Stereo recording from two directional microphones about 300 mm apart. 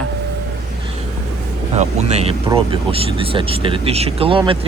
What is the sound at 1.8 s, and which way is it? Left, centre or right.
Speech, right.